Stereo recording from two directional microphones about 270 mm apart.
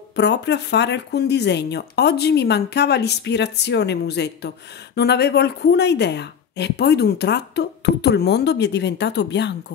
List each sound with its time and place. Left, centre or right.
0.1 s speech: left